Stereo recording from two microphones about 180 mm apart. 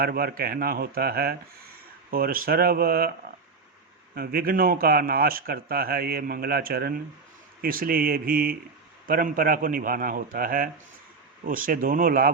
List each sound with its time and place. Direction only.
0.0 s a man's voice: 55° right (ahead or behind)
4.1 s a man's voice: 55° right (ahead or behind)